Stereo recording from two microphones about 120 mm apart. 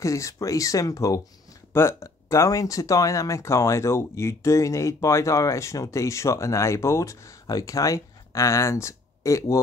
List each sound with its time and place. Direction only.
0.0 s speech: 25° left (ahead or behind)